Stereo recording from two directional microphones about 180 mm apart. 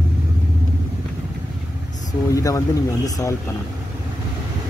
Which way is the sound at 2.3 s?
20° left (ahead or behind).